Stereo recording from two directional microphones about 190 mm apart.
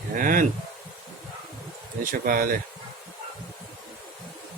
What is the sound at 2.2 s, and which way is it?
Speech, 45° right (ahead or behind).